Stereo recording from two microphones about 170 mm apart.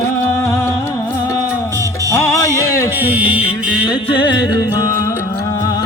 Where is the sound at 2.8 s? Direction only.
10° right (ahead or behind).